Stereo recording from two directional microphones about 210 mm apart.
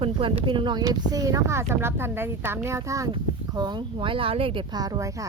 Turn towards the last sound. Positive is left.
turn(degrees=-20)  # may be behind; listen again after turning